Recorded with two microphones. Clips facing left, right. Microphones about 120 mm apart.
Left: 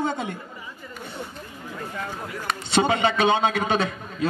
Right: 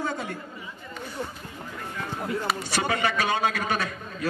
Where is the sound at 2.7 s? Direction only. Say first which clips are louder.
Left 7 dB; 25° left (ahead or behind).